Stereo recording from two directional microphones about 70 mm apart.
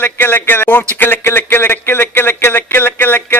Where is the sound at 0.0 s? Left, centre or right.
Left.